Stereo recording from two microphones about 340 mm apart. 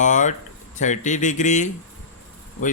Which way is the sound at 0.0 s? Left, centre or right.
Left.